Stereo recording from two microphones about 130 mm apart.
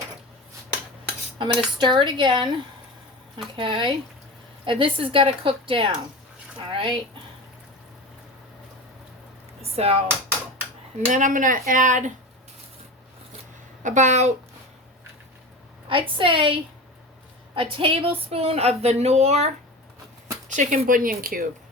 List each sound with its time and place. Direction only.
1.4 s a woman's voice: 35° right (ahead or behind)
9.6 s a sound: 50° right (ahead or behind)
11.1 s speech: 85° right
13.8 s speech: 70° right (ahead or behind)
15.9 s a woman's voice: 40° right (ahead or behind); by 19.5 s 55° right (ahead or behind)
20.5 s speech: 75° right (ahead or behind); by 21.4 s 90° right